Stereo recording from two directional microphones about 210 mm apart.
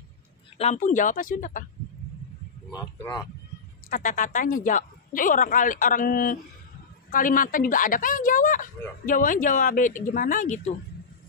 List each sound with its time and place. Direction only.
0.6 s speech: 35° left (ahead or behind)
2.7 s speech: 20° left (ahead or behind)
3.9 s speech: 40° left (ahead or behind)